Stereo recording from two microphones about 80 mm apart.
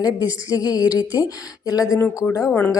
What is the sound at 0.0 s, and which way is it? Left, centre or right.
Speech, left.